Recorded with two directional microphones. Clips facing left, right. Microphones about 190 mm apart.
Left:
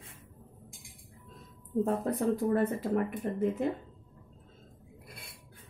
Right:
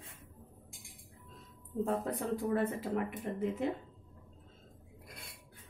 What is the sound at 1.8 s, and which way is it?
Speech, 45° left (ahead or behind).